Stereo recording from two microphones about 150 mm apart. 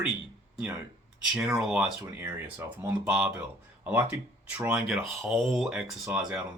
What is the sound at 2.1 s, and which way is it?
Speech, 15° right (ahead or behind).